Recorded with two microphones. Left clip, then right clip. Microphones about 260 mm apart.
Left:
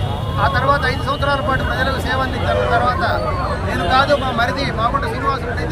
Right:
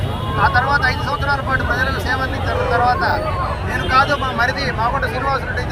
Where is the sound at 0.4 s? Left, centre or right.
Centre.